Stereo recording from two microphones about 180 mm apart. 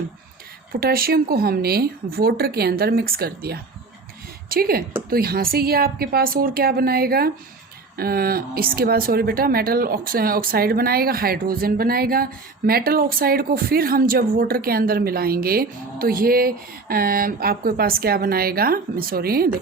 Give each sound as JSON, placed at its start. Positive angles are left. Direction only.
{"t": 0.7, "sound": "speech", "side_deg": -55}